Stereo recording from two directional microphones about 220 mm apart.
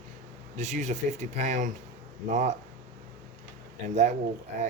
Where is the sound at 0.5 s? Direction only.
30° right (ahead or behind).